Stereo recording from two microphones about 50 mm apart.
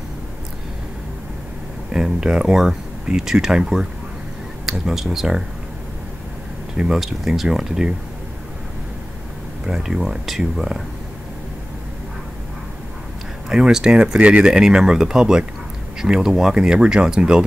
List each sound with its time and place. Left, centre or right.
1.9 s speech: centre
4.9 s speech: centre
6.9 s speech: centre
9.7 s speech: centre
13.5 s speech: centre